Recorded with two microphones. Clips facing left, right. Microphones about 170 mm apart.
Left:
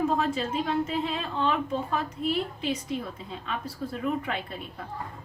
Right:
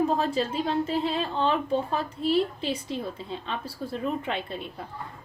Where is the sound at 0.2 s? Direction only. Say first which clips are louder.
Right 1 dB; 30° right (ahead or behind).